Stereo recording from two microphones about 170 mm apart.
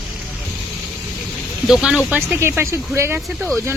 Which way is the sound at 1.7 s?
Centre (ahead or behind).